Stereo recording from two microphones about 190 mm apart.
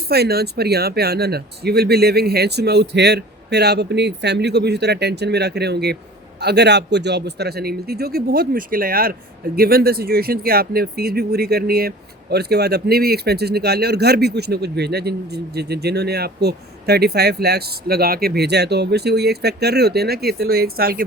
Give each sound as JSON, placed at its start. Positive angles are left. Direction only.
{"t": 0.1, "sound": "speech", "side_deg": -55}